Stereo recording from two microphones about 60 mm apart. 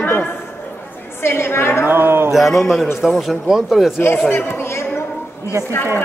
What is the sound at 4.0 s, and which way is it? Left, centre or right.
Speech, left.